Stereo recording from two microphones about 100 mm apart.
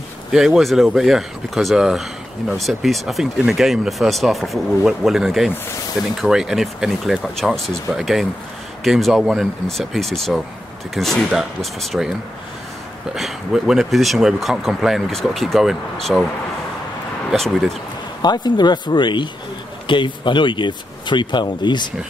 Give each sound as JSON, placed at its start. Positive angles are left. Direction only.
{"t": 0.3, "sound": "speech", "side_deg": -5}
{"t": 13.1, "sound": "speech", "side_deg": -5}
{"t": 17.3, "sound": "speech", "side_deg": 0}
{"t": 18.2, "sound": "speech", "side_deg": 45}